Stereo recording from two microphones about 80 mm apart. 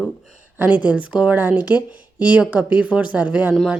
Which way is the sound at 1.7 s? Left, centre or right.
Left.